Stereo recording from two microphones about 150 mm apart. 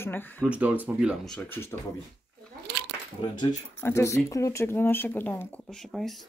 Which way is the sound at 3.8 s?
15° left (ahead or behind).